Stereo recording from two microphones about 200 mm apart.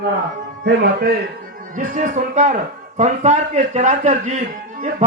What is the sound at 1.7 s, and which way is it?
A man's voice, 40° right (ahead or behind).